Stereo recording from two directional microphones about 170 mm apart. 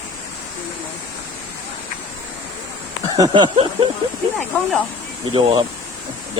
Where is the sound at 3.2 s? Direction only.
30° right (ahead or behind).